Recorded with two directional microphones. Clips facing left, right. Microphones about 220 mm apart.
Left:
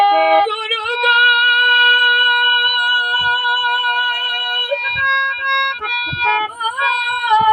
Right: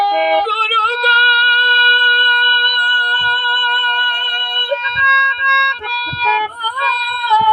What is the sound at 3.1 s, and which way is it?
Music, 10° left (ahead or behind).